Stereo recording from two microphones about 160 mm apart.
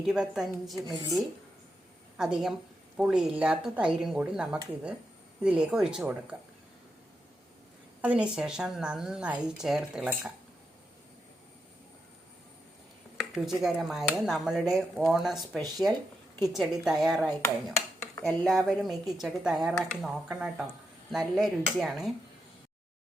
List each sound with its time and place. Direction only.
0.0 s a woman's voice: 5° right (ahead or behind)
0.9 s speech: 25° right (ahead or behind)
2.1 s a woman's voice: 5° right (ahead or behind)
8.0 s a woman's voice: 5° right (ahead or behind)
13.3 s a woman's voice: centre (ahead or behind)